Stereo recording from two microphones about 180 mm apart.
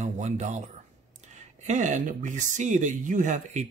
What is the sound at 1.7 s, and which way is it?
Speech, 45° right (ahead or behind).